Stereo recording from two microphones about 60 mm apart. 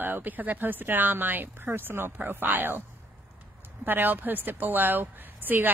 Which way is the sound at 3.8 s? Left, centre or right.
Right.